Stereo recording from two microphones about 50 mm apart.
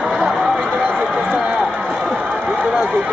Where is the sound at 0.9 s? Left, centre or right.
Centre.